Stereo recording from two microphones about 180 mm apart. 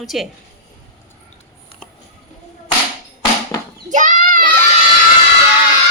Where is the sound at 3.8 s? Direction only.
45° right (ahead or behind).